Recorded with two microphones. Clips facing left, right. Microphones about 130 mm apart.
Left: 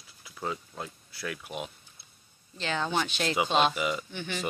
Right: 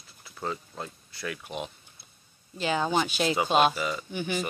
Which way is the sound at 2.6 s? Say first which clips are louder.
Right 4 dB; 10° right (ahead or behind).